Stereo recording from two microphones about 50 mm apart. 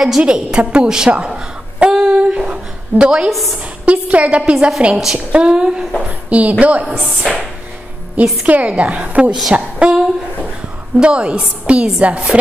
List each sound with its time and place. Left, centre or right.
0.2 s a woman's voice: right
3.3 s a woman's voice: centre
3.8 s a woman's voice: right
4.9 s a woman's voice: centre
5.3 s speech: centre
6.0 s a woman's voice: right
9.5 s a sound: centre
11.0 s a woman's voice: right